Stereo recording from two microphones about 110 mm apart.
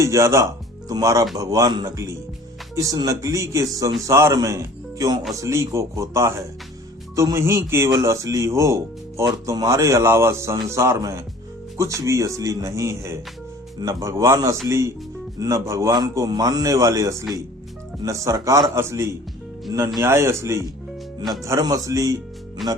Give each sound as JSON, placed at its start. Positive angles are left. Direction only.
{"t": 0.0, "sound": "speech", "side_deg": -25}
{"t": 22.6, "sound": "speech", "side_deg": 0}